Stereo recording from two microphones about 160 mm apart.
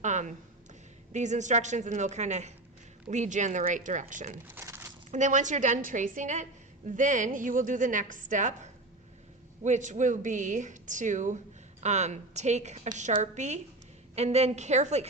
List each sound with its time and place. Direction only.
0.0 s a woman's voice: 50° right (ahead or behind)
4.5 s a sound: 15° right (ahead or behind)
5.1 s a woman's voice: 50° right (ahead or behind)